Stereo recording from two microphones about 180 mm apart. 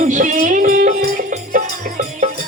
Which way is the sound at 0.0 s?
45° right (ahead or behind).